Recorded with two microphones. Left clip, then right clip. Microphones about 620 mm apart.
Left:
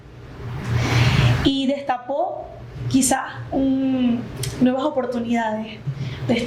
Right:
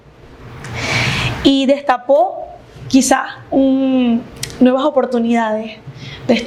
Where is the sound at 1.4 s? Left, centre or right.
Right.